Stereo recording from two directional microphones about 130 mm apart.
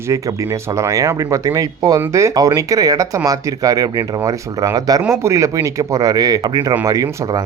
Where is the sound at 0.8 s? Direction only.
25° right (ahead or behind).